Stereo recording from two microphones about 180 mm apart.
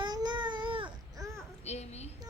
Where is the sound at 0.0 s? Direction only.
25° right (ahead or behind).